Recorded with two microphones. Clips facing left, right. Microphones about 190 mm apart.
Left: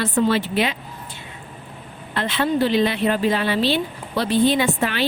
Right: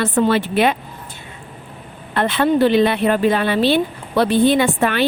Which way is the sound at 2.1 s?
55° right (ahead or behind).